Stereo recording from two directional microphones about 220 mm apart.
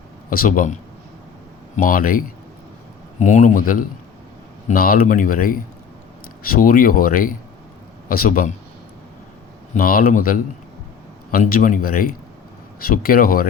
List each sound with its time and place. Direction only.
0.3 s speech: 40° left (ahead or behind)
9.7 s speech: 40° left (ahead or behind)